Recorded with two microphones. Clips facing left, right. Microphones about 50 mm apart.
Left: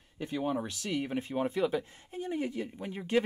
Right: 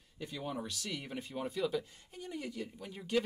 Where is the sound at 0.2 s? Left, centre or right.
Left.